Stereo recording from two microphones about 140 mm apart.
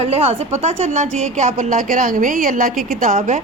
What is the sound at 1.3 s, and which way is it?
A woman's voice, 60° right (ahead or behind).